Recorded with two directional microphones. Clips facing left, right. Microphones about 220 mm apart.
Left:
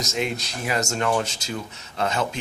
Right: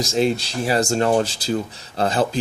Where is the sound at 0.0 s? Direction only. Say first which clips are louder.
Right 7 dB; 30° right (ahead or behind).